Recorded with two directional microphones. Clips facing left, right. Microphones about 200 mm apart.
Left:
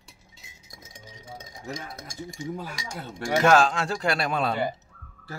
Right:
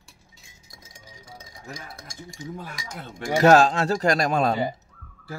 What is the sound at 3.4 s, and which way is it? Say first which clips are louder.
Speech: right 4 dB; 40° right (ahead or behind).